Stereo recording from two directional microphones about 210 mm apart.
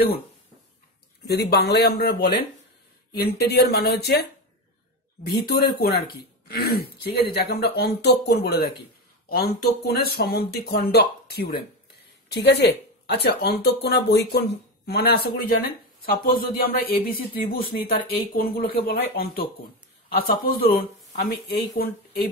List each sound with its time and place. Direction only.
1.2 s speech: 50° left (ahead or behind)
5.8 s speech: 50° left (ahead or behind)